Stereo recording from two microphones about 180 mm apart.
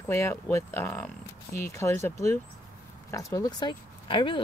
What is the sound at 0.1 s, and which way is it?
Speech, 15° left (ahead or behind).